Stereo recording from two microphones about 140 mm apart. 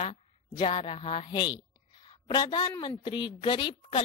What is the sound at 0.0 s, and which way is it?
A woman's voice, 40° left (ahead or behind).